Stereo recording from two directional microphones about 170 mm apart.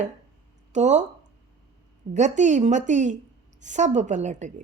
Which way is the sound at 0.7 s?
45° right (ahead or behind).